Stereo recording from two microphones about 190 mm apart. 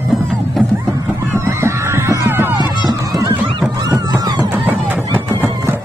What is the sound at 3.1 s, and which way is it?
Goose, 20° right (ahead or behind).